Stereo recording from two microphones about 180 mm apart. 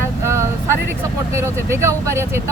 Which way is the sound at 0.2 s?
15° right (ahead or behind).